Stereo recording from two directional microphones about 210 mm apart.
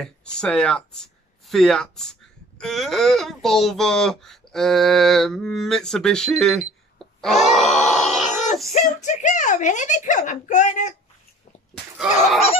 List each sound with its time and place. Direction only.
0.0 s speech: 5° left (ahead or behind)
7.0 s grunt: centre (ahead or behind)
8.7 s speech: 35° left (ahead or behind)